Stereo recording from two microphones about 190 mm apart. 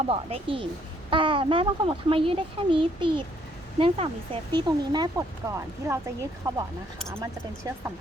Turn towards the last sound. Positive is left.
turn(degrees=-15)  # may be behind; listen again after turning